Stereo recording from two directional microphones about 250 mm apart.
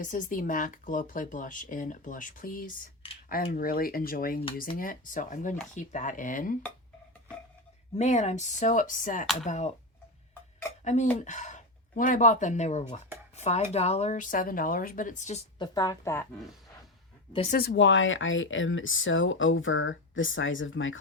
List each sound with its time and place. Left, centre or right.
0.0 s speech: left
7.9 s speech: left
10.8 s speech: left
15.5 s a woman's voice: centre
17.3 s speech: left
17.6 s speech: left